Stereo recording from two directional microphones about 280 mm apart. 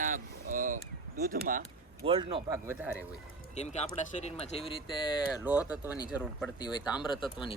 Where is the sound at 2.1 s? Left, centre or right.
Centre.